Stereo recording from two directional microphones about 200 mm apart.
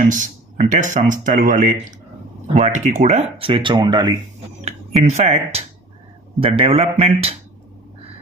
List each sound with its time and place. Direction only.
0.1 s speech: 40° right (ahead or behind); by 4.1 s 20° right (ahead or behind)
4.6 s speech: 35° right (ahead or behind)